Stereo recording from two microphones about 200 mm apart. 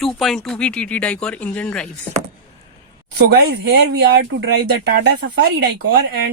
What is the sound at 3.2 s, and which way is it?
Speech, 55° right (ahead or behind).